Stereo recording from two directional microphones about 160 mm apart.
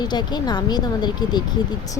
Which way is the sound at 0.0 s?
25° left (ahead or behind).